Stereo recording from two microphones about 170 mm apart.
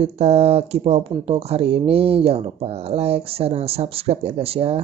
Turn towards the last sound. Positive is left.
turn(degrees=-35)  # may be behind; listen again after turning